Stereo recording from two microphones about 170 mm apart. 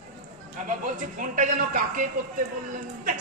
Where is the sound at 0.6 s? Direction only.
50° right (ahead or behind).